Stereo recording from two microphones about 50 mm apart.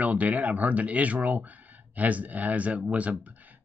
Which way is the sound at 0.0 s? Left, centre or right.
Right.